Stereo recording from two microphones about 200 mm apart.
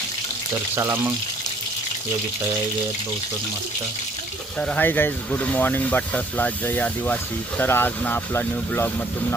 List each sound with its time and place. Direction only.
0.8 s speech: 10° right (ahead or behind)
4.6 s speech: 5° left (ahead or behind)